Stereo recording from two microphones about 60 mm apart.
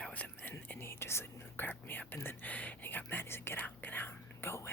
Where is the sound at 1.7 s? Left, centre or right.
Left.